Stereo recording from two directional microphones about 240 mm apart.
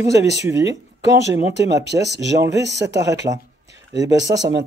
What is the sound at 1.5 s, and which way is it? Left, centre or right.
Speech, right.